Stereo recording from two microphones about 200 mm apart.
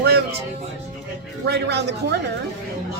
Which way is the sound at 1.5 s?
55° right (ahead or behind).